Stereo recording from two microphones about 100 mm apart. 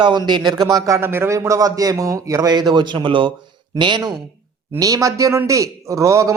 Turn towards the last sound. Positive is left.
turn(degrees=-30)  # may be behind; listen again after turning